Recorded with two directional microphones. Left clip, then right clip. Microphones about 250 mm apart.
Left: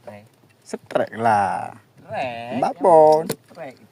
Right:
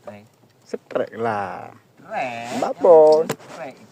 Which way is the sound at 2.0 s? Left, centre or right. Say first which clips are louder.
Right 1 dB; centre.